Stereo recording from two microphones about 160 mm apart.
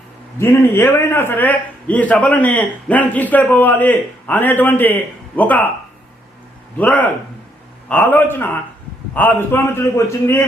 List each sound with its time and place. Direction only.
0.3 s a man's voice: 15° left (ahead or behind)
6.7 s a man's voice: 10° left (ahead or behind)